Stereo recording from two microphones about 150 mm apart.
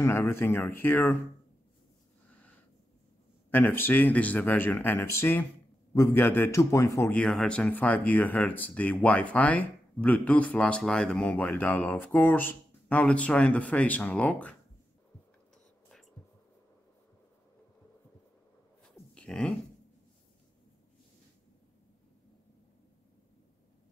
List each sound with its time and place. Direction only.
0.0 s speech: 15° left (ahead or behind)
3.4 s a man's voice: 15° left (ahead or behind)
7.2 s speech: 5° left (ahead or behind)
19.1 s dog: 5° left (ahead or behind)